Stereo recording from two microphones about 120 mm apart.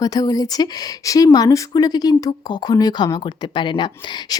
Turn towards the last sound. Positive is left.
turn(degrees=40)  # may be behind; listen again after turning